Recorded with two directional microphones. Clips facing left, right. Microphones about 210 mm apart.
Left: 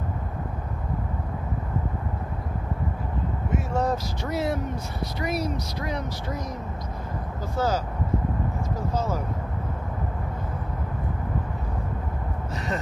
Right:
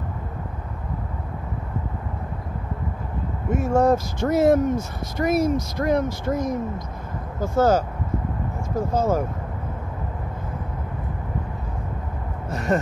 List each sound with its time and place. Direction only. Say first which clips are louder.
3.4 s speech: right 8 dB; 50° right (ahead or behind)
8.9 s speech: right 7 dB; 50° right (ahead or behind)
12.4 s a sound: right 9 dB; 50° right (ahead or behind)